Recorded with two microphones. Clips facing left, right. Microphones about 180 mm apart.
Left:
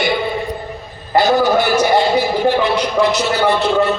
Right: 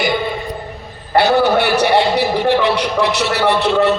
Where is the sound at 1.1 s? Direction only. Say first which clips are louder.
Even; 65° right (ahead or behind).